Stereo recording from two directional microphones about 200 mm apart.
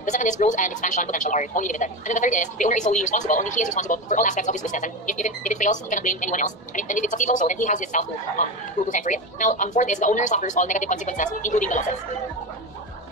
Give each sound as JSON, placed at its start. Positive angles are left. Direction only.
{"t": 0.0, "sound": "a woman's voice", "side_deg": 40}